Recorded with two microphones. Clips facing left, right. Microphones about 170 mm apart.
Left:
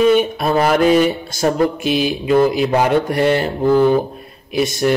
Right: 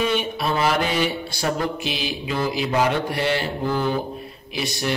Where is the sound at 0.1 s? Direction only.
45° left (ahead or behind).